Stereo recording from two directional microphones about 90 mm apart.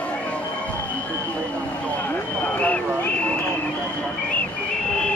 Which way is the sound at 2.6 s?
15° left (ahead or behind).